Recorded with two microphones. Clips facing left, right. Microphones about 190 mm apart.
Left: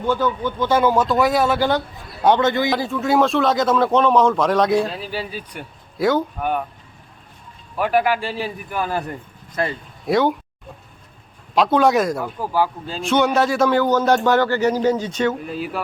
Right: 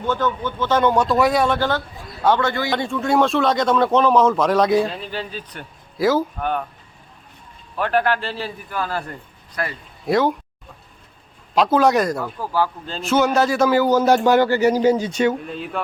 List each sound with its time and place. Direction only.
0.0 s a man's voice: 10° left (ahead or behind)
1.5 s a man's voice: 15° left (ahead or behind)
2.7 s a man's voice: centre (ahead or behind)
6.0 s a man's voice: centre (ahead or behind)
6.4 s a man's voice: 10° left (ahead or behind)
7.8 s a man's voice: 10° left (ahead or behind)
10.1 s a man's voice: centre (ahead or behind)
11.5 s a man's voice: centre (ahead or behind)
12.2 s a man's voice: 15° left (ahead or behind)
13.0 s speech: 5° right (ahead or behind)
15.4 s a man's voice: 5° left (ahead or behind)